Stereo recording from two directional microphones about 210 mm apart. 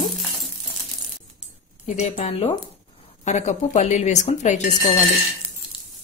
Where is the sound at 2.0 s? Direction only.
30° left (ahead or behind).